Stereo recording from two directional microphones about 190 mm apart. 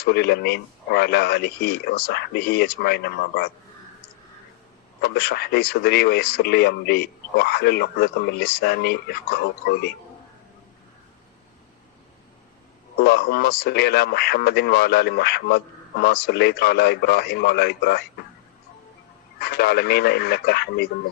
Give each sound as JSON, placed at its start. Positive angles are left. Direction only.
{"t": 0.0, "sound": "a man's voice", "side_deg": 55}
{"t": 4.9, "sound": "a man's voice", "side_deg": 55}
{"t": 13.1, "sound": "a man's voice", "side_deg": 55}
{"t": 19.4, "sound": "a man's voice", "side_deg": 55}